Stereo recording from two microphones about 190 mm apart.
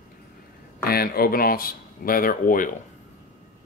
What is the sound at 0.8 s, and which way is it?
Speech, 50° left (ahead or behind).